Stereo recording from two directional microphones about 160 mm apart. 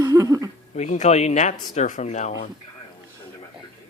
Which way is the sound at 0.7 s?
45° left (ahead or behind).